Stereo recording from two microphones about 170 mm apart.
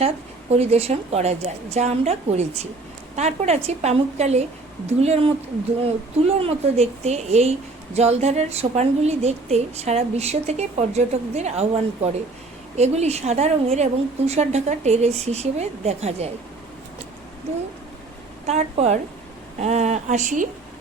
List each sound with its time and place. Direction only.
0.5 s a woman's voice: 40° right (ahead or behind)
18.4 s a woman's voice: 40° right (ahead or behind)